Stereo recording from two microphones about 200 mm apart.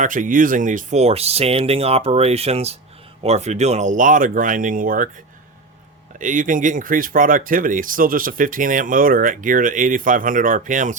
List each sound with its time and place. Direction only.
0.0 s speech: 40° right (ahead or behind)
6.1 s speech: 40° right (ahead or behind)